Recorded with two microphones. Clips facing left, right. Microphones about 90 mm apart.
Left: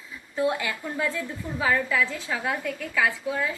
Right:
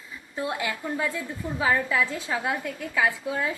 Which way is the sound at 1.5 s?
20° right (ahead or behind).